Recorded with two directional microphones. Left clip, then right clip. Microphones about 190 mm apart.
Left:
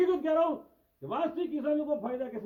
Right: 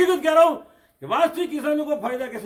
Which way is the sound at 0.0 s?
10° right (ahead or behind).